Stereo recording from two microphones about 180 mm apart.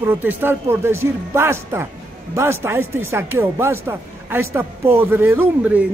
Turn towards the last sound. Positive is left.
turn(degrees=-10)  # may be behind; listen again after turning